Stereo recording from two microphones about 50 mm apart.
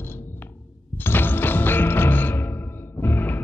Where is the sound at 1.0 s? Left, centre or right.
Left.